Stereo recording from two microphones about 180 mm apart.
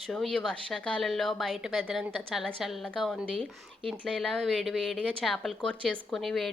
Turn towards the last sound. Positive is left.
turn(degrees=0)  # may be behind; listen again after turning